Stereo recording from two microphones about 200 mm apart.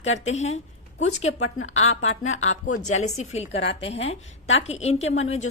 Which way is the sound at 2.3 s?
90° left.